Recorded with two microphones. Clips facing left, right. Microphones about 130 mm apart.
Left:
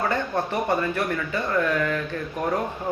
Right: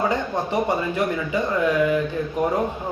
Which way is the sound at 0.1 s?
15° right (ahead or behind).